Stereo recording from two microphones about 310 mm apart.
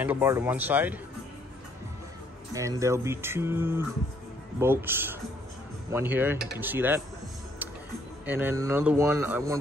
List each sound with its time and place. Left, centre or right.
0.0 s speech: centre
2.5 s speech: centre
8.3 s speech: centre